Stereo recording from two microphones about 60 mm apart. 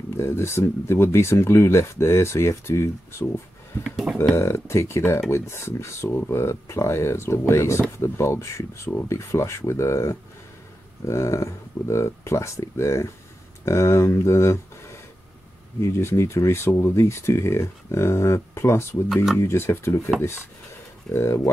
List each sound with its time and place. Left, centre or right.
0.1 s speech: left
4.1 s speech: centre
4.4 s speech: left
21.1 s speech: left